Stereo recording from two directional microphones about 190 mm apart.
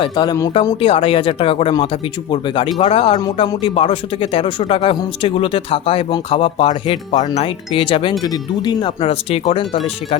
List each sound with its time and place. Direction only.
0.0 s speech: 20° left (ahead or behind)